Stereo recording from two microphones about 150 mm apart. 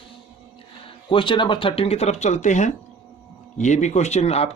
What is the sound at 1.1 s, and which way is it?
A man's voice, 35° left (ahead or behind).